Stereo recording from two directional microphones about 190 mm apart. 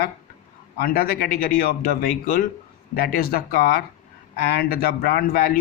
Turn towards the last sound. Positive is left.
turn(degrees=50)  # may be behind; listen again after turning